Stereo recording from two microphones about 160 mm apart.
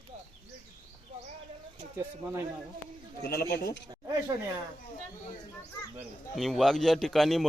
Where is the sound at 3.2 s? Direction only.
75° left (ahead or behind).